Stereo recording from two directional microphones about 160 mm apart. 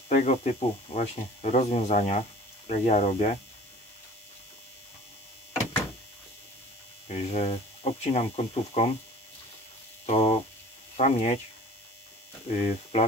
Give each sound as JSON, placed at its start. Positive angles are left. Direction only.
{"t": 0.1, "sound": "speech", "side_deg": 45}
{"t": 7.1, "sound": "speech", "side_deg": 45}
{"t": 10.0, "sound": "mains hum", "side_deg": 40}
{"t": 11.0, "sound": "speech", "side_deg": 45}
{"t": 12.4, "sound": "speech", "side_deg": 45}